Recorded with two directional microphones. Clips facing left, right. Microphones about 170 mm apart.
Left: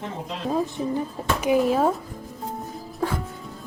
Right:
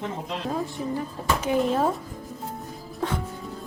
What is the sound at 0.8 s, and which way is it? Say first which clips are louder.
Speech: left 3 dB; 25° left (ahead or behind).